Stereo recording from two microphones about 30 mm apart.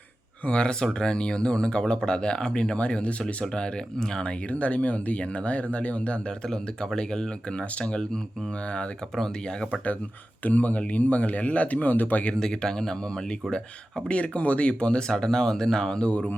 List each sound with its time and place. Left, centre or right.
0.4 s speech: left
2.7 s speech: left
3.4 s speech: left
3.9 s speech: left
4.4 s speech: left
6.5 s speech: left
7.6 s speech: left
10.4 s speech: left
12.4 s speech: centre
14.1 s speech: left
15.0 s speech: left